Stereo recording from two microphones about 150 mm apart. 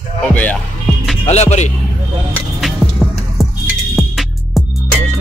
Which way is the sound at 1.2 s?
45° left (ahead or behind).